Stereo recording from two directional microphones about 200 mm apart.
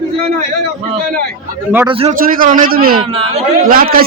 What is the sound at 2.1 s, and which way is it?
A man's voice, 45° right (ahead or behind).